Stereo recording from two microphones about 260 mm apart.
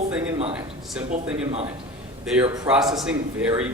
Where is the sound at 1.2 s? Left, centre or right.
Centre.